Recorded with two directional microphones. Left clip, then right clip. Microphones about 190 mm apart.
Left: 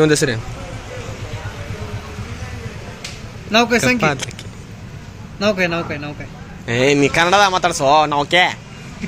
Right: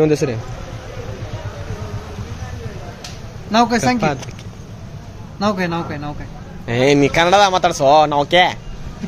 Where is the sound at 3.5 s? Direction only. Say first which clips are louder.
Left 1 dB; 30° right (ahead or behind).